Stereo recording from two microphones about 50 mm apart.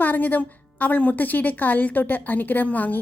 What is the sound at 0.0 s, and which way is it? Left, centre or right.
A woman's voice, left.